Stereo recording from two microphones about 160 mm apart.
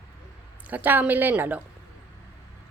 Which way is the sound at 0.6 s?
10° right (ahead or behind).